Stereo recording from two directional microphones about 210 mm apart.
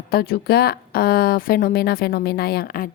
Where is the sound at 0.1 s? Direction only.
45° left (ahead or behind).